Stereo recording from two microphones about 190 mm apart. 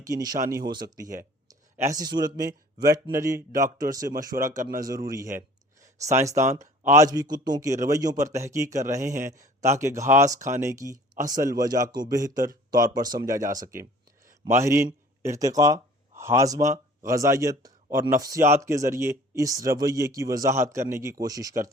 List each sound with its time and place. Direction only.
0.0 s speech: 20° right (ahead or behind)
4.3 s speech: 45° right (ahead or behind)
4.8 s a man's voice: 20° right (ahead or behind)